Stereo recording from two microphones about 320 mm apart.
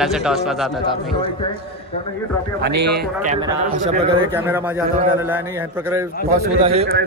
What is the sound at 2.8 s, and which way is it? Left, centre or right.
Speech, right.